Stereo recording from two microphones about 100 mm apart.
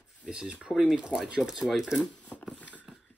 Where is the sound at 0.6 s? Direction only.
5° right (ahead or behind).